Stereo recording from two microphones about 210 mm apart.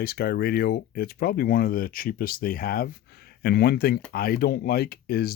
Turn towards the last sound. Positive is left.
turn(degrees=45)  # may be behind; listen again after turning